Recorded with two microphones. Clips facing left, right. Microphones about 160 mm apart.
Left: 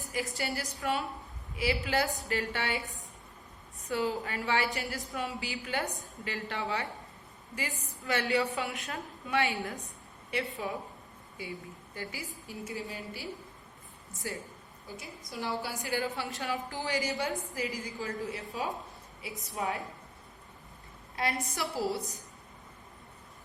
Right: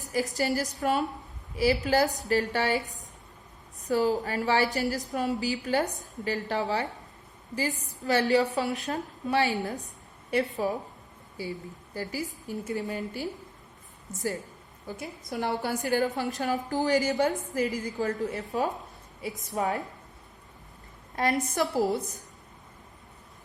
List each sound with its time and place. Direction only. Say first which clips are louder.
0.0 s a woman's voice: right 7 dB; 40° right (ahead or behind)
14.9 s a woman's voice: right 6 dB; 55° right (ahead or behind)
15.8 s a woman's voice: right 7 dB; 45° right (ahead or behind)
21.2 s a woman's voice: right 7 dB; 45° right (ahead or behind)